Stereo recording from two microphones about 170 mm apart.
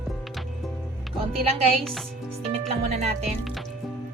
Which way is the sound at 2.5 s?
40° right (ahead or behind).